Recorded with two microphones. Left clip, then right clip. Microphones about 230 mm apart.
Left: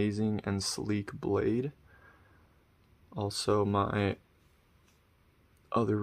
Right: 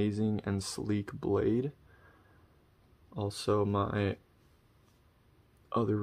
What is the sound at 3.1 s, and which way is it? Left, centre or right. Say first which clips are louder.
Speech: left 1 dB; centre.